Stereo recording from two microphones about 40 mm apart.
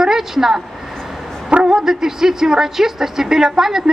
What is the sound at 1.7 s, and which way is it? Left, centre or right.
Speech, centre.